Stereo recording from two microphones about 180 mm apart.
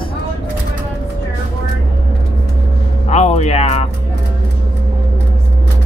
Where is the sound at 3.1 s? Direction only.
35° left (ahead or behind).